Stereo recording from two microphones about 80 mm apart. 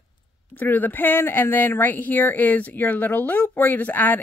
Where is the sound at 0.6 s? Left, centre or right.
Left.